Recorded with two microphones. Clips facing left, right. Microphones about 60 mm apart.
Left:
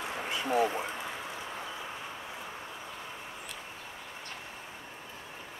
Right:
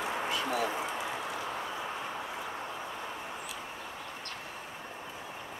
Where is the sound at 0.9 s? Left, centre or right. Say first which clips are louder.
Right 3 dB; centre.